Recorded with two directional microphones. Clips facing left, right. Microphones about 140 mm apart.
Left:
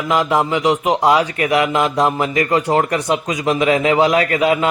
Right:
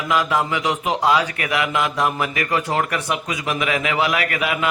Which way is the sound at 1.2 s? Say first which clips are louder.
Left 6 dB; 30° left (ahead or behind).